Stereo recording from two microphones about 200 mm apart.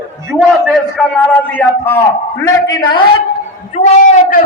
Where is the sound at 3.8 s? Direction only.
35° left (ahead or behind).